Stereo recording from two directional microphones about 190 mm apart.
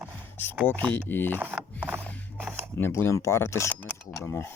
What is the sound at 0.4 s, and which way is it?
Speech, 10° left (ahead or behind).